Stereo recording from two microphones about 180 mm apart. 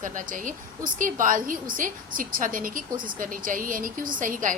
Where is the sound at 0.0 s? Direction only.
45° right (ahead or behind).